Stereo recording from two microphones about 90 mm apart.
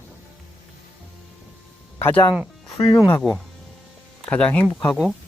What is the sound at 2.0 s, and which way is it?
Speech, 25° left (ahead or behind).